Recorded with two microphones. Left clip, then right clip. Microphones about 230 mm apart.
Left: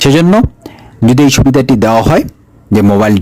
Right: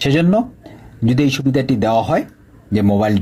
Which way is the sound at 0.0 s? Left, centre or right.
Left.